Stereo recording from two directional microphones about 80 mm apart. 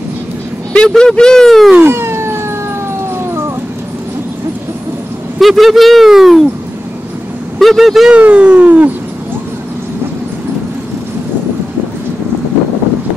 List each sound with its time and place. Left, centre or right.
0.7 s speech: centre
1.8 s emergency vehicle: right
3.2 s a sound: right
5.4 s speech: centre
7.5 s speech: centre
8.1 s speech: centre